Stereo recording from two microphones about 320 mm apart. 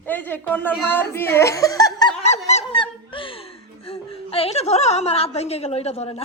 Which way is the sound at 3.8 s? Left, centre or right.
Centre.